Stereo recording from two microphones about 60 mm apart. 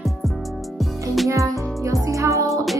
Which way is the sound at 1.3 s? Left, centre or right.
Right.